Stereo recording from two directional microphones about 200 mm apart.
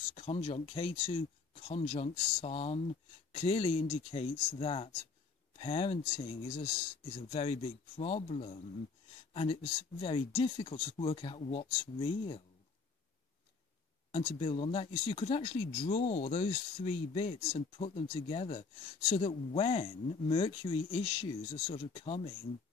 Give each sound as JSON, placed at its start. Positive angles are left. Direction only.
{"t": 0.1, "sound": "speech", "side_deg": 30}
{"t": 14.1, "sound": "speech", "side_deg": 30}